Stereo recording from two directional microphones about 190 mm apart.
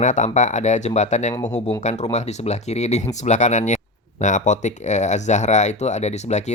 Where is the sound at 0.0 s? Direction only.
40° left (ahead or behind).